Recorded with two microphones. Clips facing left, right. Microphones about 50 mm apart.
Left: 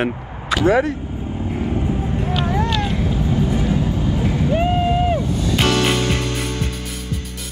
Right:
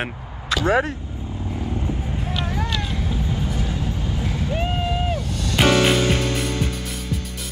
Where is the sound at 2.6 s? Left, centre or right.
Left.